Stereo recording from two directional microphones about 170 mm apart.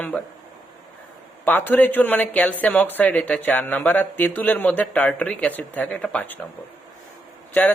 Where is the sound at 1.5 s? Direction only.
10° left (ahead or behind).